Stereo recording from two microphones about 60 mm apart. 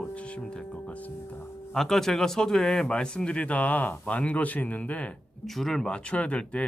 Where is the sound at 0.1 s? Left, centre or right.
Left.